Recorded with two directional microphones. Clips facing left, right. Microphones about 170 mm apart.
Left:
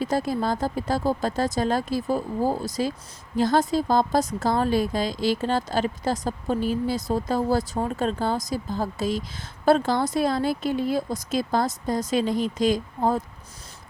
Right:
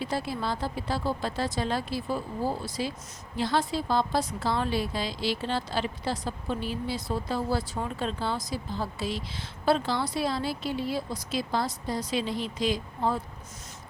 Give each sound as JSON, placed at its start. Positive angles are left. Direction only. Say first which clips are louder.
{"t": 0.0, "sound": "a woman's voice", "louder": "left 6 dB", "side_deg": 45}